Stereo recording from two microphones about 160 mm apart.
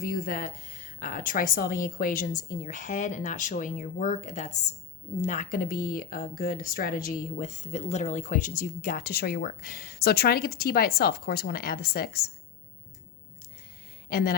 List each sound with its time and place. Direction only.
0.0 s speech: 60° left (ahead or behind)
14.1 s speech: 70° left (ahead or behind)